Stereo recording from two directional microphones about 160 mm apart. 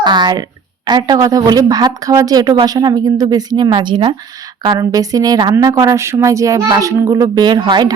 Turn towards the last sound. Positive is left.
turn(degrees=-25)  # may be behind; listen again after turning